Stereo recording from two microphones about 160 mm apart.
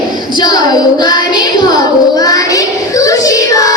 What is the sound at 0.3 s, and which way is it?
Child singing, 25° left (ahead or behind).